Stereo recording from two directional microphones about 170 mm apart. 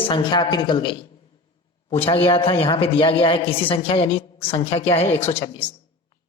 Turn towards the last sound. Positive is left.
turn(degrees=35)  # may be behind; listen again after turning